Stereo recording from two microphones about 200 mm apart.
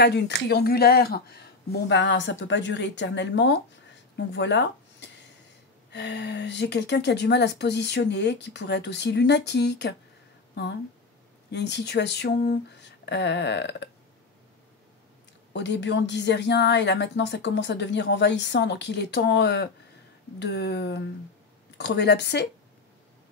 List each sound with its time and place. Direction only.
0.0 s a woman's voice: 60° left (ahead or behind)
11.5 s a woman's voice: 60° left (ahead or behind)
12.4 s music: 55° left (ahead or behind)
15.5 s a woman's voice: 60° left (ahead or behind)